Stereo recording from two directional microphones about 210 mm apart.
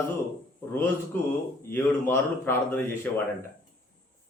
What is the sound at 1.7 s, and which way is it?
Speech, 10° left (ahead or behind).